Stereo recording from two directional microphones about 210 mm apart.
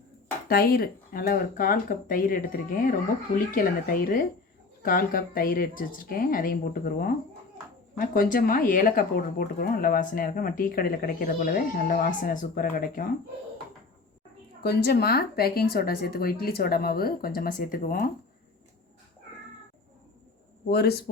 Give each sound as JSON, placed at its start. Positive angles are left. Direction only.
{"t": 0.4, "sound": "speech", "side_deg": 45}
{"t": 14.6, "sound": "speech", "side_deg": 50}
{"t": 20.7, "sound": "speech", "side_deg": 50}